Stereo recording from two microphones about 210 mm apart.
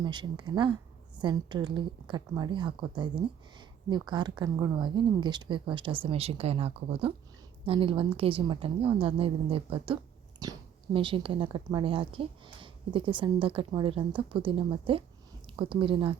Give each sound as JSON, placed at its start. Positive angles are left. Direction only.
{"t": 0.0, "sound": "speech", "side_deg": -20}